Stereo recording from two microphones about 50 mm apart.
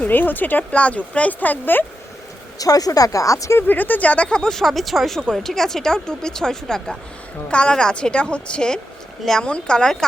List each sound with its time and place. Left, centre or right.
0.0 s speech: left
0.7 s a woman's voice: left
3.1 s speech: left
3.7 s a woman's voice: left; by 10.1 s centre